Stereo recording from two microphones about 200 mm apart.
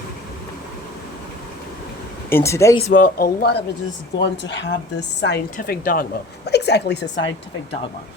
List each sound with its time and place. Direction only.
2.3 s speech: 15° left (ahead or behind)
2.9 s speech: 45° left (ahead or behind)
4.2 s a woman's voice: 60° left (ahead or behind)
5.5 s a woman's voice: 45° left (ahead or behind); by 7.3 s 60° left (ahead or behind)